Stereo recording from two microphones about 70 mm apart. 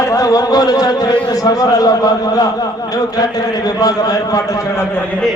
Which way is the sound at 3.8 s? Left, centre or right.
Left.